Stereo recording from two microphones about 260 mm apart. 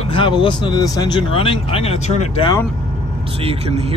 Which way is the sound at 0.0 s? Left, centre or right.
Centre.